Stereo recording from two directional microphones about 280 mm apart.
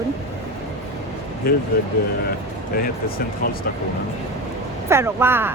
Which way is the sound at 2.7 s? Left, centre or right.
Left.